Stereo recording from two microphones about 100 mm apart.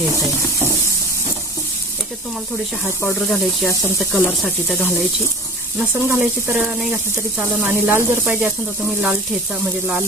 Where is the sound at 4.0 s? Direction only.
15° left (ahead or behind).